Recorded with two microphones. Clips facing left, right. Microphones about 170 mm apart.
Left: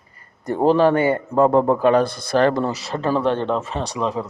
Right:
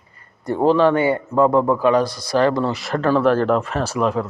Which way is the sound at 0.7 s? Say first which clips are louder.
Even; 45° left (ahead or behind).